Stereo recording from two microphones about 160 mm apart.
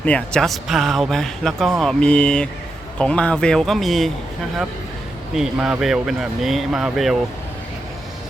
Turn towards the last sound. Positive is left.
turn(degrees=0)  # may be behind; listen again after turning